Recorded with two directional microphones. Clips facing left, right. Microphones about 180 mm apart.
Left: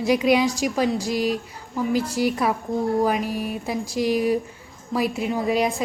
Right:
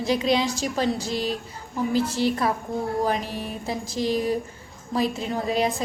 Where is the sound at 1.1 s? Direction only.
30° right (ahead or behind).